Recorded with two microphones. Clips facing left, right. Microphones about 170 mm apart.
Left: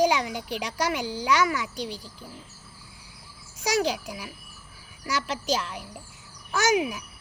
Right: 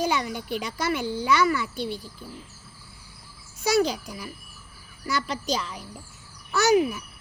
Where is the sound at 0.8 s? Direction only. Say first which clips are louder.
Right 1 dB; 10° left (ahead or behind).